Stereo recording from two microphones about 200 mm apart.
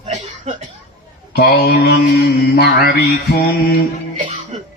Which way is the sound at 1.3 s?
55° left (ahead or behind).